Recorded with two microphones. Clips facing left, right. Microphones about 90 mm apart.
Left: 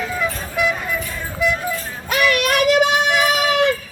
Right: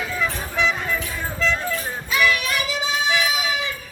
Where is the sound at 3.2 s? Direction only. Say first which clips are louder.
Left 7 dB; 65° left (ahead or behind).